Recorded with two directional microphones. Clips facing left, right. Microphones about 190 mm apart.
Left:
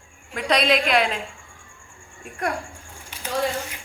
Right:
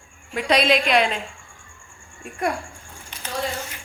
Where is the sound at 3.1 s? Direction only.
10° left (ahead or behind).